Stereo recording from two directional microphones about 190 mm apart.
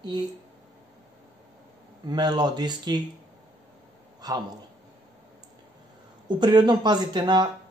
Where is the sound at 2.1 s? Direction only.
20° right (ahead or behind).